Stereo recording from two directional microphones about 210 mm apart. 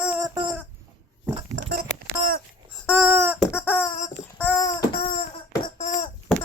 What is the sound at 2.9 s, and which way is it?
Baby cry, 10° right (ahead or behind).